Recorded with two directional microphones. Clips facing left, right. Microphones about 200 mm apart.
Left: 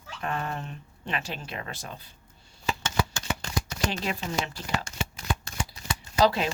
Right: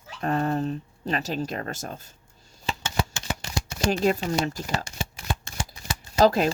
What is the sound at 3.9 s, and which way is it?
Speech, 40° right (ahead or behind).